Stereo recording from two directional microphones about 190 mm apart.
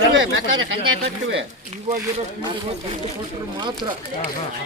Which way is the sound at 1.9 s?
40° right (ahead or behind).